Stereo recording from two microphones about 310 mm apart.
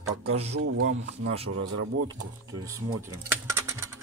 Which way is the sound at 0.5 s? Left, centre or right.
Right.